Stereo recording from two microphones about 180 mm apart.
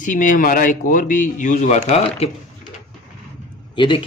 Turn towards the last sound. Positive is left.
turn(degrees=25)  # may be behind; listen again after turning